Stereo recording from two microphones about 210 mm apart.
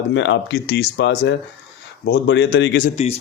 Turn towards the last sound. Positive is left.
turn(degrees=30)  # may be behind; listen again after turning